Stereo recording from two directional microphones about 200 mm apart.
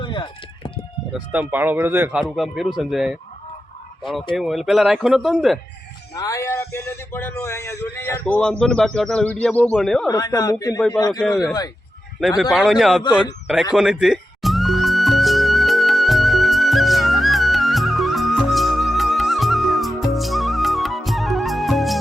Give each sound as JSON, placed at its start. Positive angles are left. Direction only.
{"t": 0.0, "sound": "a sound", "side_deg": 25}
{"t": 1.1, "sound": "speech", "side_deg": -10}
{"t": 4.4, "sound": "speech", "side_deg": 0}
{"t": 6.1, "sound": "a man's voice", "side_deg": 15}
{"t": 10.1, "sound": "a man's voice", "side_deg": 20}
{"t": 10.8, "sound": "speech", "side_deg": 5}
{"t": 12.4, "sound": "speech", "side_deg": 0}
{"t": 13.7, "sound": "music", "side_deg": -5}